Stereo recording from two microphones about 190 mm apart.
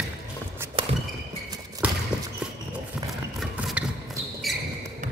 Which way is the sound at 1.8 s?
5° right (ahead or behind).